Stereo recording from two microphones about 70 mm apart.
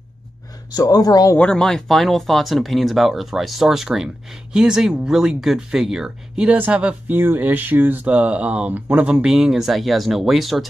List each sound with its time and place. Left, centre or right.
0.7 s speech: left
1.4 s speech: centre
6.5 s speech: right
9.3 s speech: centre